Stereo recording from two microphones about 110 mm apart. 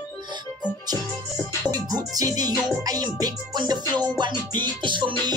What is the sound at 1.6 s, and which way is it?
Speech, 35° right (ahead or behind).